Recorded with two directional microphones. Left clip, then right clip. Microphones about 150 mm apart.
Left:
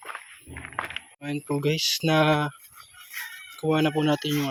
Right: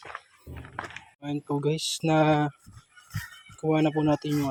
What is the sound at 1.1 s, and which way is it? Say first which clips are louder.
Speech: even; 5° right (ahead or behind).